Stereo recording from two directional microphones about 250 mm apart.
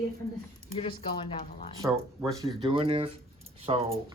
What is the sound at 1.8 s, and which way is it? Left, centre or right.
Speech, centre.